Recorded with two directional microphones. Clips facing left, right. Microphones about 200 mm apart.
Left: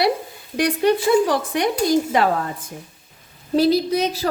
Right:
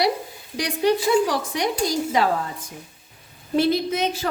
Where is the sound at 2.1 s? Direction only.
55° left (ahead or behind).